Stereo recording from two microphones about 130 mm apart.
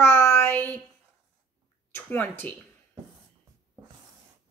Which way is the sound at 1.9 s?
15° left (ahead or behind).